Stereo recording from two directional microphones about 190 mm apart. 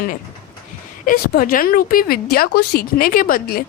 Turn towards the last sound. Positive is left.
turn(degrees=50)  # may be behind; listen again after turning